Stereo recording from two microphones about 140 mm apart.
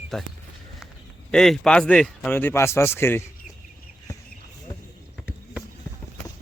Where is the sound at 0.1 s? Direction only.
5° left (ahead or behind).